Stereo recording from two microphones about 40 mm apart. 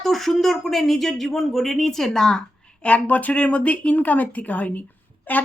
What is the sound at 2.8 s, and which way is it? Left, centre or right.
A woman's voice, left.